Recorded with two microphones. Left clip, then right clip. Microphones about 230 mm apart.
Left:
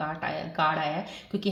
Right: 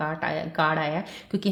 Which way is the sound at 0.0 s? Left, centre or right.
Right.